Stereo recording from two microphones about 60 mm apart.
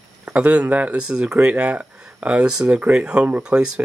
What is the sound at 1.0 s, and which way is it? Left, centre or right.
Speech, centre.